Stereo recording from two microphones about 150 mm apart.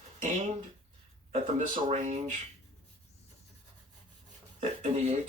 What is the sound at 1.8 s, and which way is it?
Speech, 50° right (ahead or behind).